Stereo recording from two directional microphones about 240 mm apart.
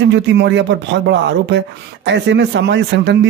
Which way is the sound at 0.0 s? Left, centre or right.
Right.